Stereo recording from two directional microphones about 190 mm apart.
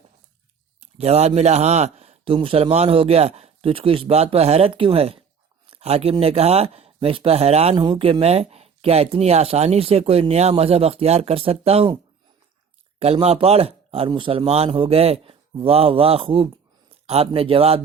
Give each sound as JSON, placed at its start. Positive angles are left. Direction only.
{"t": 0.8, "sound": "speech", "side_deg": -30}
{"t": 13.1, "sound": "speech", "side_deg": -30}